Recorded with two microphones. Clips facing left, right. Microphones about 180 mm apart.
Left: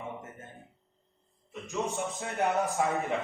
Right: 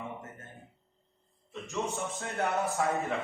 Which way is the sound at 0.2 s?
20° left (ahead or behind).